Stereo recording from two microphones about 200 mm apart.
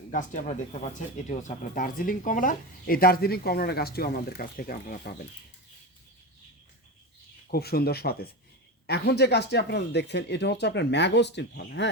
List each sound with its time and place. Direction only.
0.1 s speech: 40° left (ahead or behind)
7.5 s speech: 50° left (ahead or behind)